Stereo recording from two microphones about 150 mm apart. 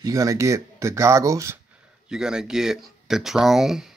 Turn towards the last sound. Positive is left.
turn(degrees=-5)  # may be behind; listen again after turning